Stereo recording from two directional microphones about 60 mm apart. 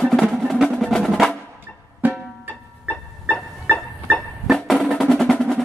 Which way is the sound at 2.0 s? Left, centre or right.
Right.